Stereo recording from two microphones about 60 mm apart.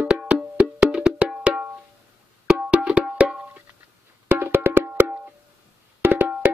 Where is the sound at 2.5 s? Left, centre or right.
Centre.